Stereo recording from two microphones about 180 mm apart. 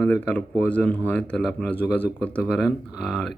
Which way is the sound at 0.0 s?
10° left (ahead or behind).